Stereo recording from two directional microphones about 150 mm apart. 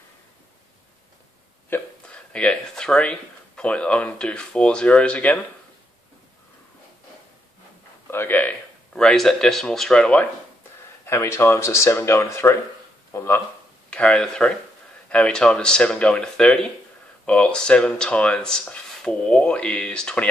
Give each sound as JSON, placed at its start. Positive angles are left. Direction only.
{"t": 1.7, "sound": "speech", "side_deg": 5}
{"t": 8.1, "sound": "speech", "side_deg": 15}
{"t": 11.1, "sound": "speech", "side_deg": 15}
{"t": 13.8, "sound": "speech", "side_deg": 5}